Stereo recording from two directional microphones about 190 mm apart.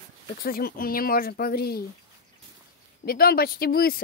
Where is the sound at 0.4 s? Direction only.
50° left (ahead or behind).